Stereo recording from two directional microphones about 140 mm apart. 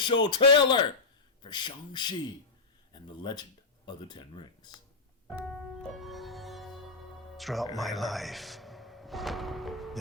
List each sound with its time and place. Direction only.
0.0 s speech: 35° left (ahead or behind)
5.9 s music: centre (ahead or behind)
7.3 s speech: centre (ahead or behind)
7.8 s thump: centre (ahead or behind)